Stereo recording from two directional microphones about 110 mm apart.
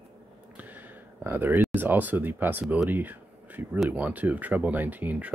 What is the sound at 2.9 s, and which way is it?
Speech, 15° right (ahead or behind).